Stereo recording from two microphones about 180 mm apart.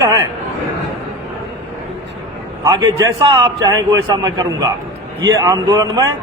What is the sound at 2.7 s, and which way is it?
A man's voice, 20° right (ahead or behind).